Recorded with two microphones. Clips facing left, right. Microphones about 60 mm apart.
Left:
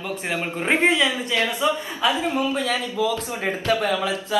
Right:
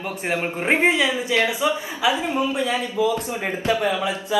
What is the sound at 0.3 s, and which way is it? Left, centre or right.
A man's voice, right.